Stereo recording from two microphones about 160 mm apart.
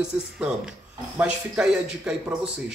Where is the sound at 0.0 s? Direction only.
5° right (ahead or behind).